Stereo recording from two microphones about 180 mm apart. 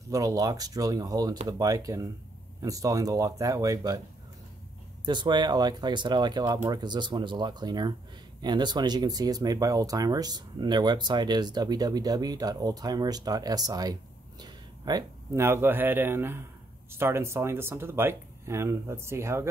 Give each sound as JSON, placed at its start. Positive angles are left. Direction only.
{"t": 0.1, "sound": "speech", "side_deg": -20}
{"t": 5.0, "sound": "a man's voice", "side_deg": -25}